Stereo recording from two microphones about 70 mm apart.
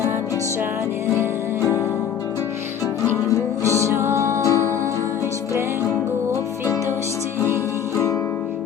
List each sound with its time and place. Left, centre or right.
3.8 s music: right